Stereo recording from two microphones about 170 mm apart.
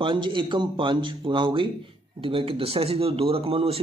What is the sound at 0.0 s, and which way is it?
Speech, 30° right (ahead or behind).